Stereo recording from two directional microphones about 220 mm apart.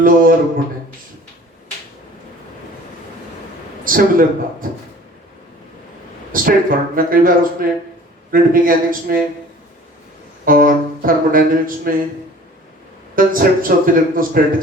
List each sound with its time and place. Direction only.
0.0 s a man's voice: 40° right (ahead or behind)
3.8 s music: 40° right (ahead or behind)
6.3 s music: 40° right (ahead or behind)
10.4 s music: 40° right (ahead or behind)
13.1 s music: 40° right (ahead or behind)